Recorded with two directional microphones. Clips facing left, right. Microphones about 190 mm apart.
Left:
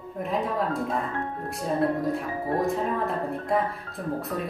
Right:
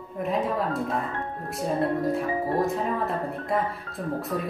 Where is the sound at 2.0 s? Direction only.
Centre (ahead or behind).